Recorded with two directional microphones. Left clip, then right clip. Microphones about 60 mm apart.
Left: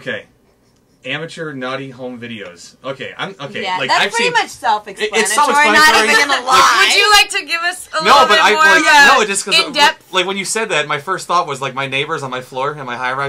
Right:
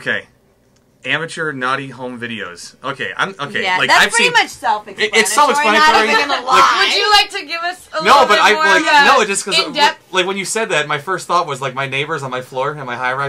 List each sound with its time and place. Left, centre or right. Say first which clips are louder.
1.0 s speech: right 4 dB; right
4.6 s speech: left 1 dB; centre
4.9 s speech: right 1 dB; right
5.8 s speech: even; left
8.3 s speech: even; centre
8.8 s speech: left 2 dB; left
9.1 s speech: even; centre
9.7 s speech: left 1 dB; left
10.1 s speech: even; centre